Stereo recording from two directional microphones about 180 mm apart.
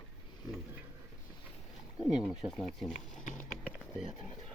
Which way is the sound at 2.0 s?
Centre (ahead or behind).